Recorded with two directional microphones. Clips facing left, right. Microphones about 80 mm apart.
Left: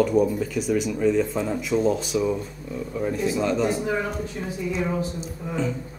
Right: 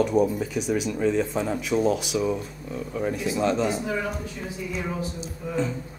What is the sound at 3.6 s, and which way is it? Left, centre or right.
Speech, left.